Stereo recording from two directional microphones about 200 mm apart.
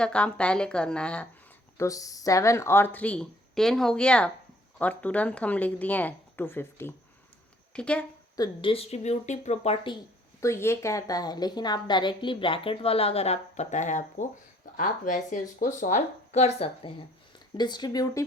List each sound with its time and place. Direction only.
0.0 s a woman's voice: 5° left (ahead or behind)
1.8 s a woman's voice: 15° left (ahead or behind)
8.4 s speech: 25° left (ahead or behind)
10.4 s a woman's voice: 15° left (ahead or behind)